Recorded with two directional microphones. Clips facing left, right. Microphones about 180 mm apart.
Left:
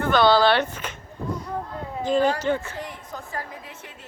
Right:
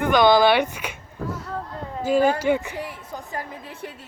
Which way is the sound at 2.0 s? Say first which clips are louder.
Right 2 dB; 10° right (ahead or behind).